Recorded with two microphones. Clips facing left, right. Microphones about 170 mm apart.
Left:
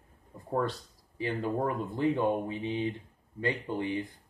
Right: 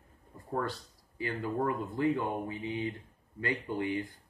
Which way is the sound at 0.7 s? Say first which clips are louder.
Left 1 dB; 25° left (ahead or behind).